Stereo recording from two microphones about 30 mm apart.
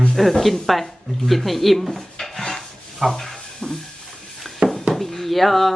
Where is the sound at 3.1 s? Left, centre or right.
Centre.